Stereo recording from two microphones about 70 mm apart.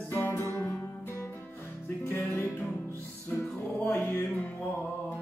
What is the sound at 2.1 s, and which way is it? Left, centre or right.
Music, left.